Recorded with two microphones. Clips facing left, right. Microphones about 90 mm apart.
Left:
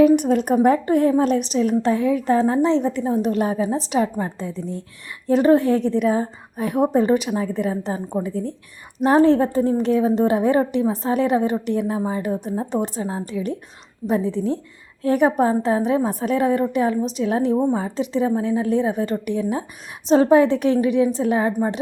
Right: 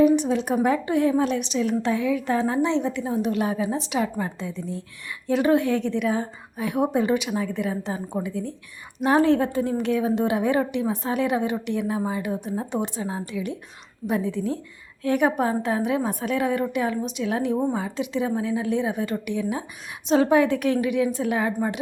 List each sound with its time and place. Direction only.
0.2 s a woman's voice: 50° left (ahead or behind); by 21.5 s 35° left (ahead or behind)